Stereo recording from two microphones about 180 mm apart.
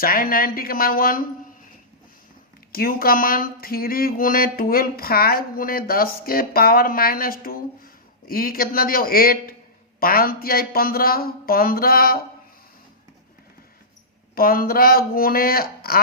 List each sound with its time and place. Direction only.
0.0 s speech: 55° left (ahead or behind)
2.7 s speech: 55° left (ahead or behind)
14.3 s speech: 55° left (ahead or behind)